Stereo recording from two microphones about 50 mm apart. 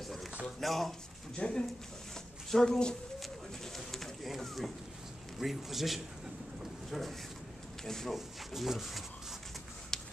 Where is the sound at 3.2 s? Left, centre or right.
Centre.